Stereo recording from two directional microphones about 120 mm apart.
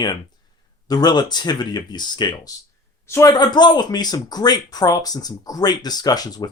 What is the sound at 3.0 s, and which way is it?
Speech, 20° left (ahead or behind).